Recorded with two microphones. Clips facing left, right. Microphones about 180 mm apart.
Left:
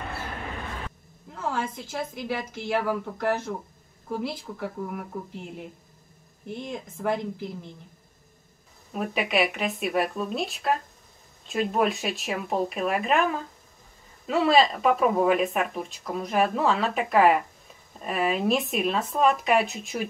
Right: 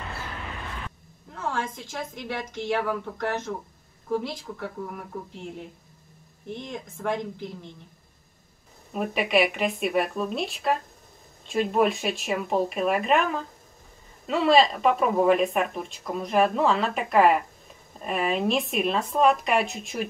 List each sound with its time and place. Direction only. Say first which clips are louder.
1.3 s speech: left 1 dB; 5° left (ahead or behind)
8.9 s speech: right 2 dB; centre (ahead or behind)